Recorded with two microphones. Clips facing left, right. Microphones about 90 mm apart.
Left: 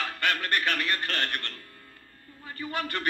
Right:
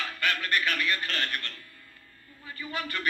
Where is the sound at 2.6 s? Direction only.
45° left (ahead or behind).